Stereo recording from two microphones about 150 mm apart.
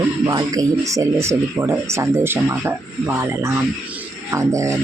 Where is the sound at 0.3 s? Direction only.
25° right (ahead or behind).